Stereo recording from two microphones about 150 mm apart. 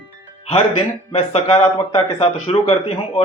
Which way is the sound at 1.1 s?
40° left (ahead or behind).